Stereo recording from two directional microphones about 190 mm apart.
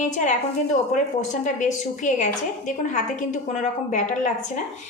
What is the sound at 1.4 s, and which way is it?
A woman's voice, 40° left (ahead or behind).